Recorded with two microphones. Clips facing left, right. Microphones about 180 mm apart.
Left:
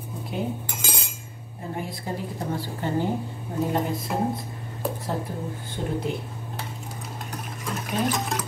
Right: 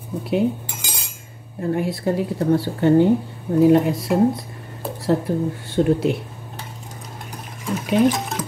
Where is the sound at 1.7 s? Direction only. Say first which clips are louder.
Right 10 dB; 75° right (ahead or behind).